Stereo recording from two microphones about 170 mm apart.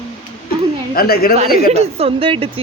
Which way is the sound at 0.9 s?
65° left (ahead or behind).